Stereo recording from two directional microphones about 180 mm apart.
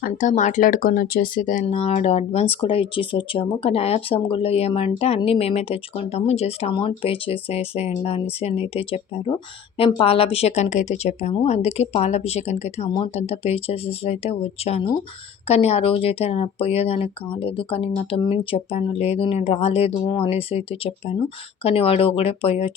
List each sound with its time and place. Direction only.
0.0 s a woman's voice: 45° left (ahead or behind)